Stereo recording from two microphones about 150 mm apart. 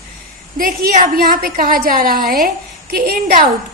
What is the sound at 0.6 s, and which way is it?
A woman's voice, 65° right (ahead or behind).